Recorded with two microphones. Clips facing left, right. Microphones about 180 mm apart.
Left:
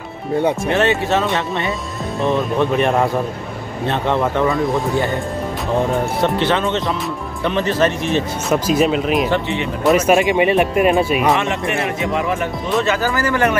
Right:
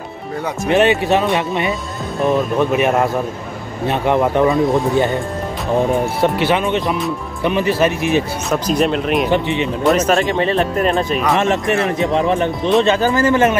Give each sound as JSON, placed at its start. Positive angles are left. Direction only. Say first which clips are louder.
{"t": 0.7, "sound": "speech", "louder": "right 3 dB", "side_deg": -15}
{"t": 2.2, "sound": "speech", "louder": "right 2 dB", "side_deg": -5}
{"t": 6.2, "sound": "speech", "louder": "right 2 dB", "side_deg": -10}
{"t": 8.5, "sound": "speech", "louder": "left 3 dB", "side_deg": 5}
{"t": 9.3, "sound": "speech", "louder": "right 3 dB", "side_deg": -20}
{"t": 9.8, "sound": "speech", "louder": "left 2 dB", "side_deg": 10}
{"t": 11.3, "sound": "speech", "louder": "right 4 dB", "side_deg": -40}